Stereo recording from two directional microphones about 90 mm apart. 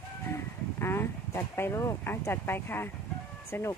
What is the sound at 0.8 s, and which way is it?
Speech, 30° left (ahead or behind).